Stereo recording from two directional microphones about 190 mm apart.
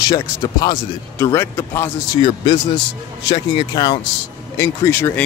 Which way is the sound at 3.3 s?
20° left (ahead or behind).